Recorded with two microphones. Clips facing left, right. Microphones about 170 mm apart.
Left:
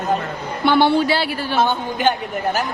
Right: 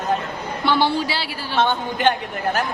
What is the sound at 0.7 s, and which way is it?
Speech, 55° left (ahead or behind).